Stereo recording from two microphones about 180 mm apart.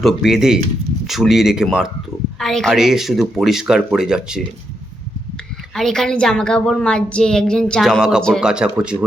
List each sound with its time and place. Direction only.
0.0 s a woman's voice: centre (ahead or behind)
5.7 s a woman's voice: centre (ahead or behind)